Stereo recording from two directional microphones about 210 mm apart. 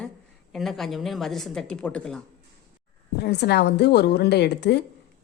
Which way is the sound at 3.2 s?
50° left (ahead or behind).